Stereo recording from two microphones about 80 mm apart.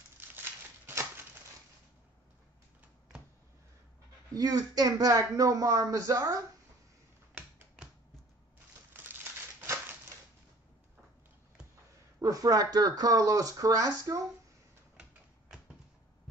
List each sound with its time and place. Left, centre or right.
0.2 s crumpling: right
0.8 s typewriter: right
4.3 s speech: right
7.3 s typing: centre
8.9 s crumpling: right
12.2 s speech: right